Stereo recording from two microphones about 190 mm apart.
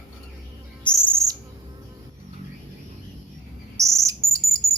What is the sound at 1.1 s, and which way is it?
Owl, 15° right (ahead or behind).